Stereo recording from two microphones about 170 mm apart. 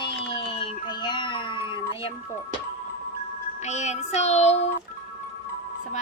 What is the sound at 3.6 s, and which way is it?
Speech, 45° left (ahead or behind).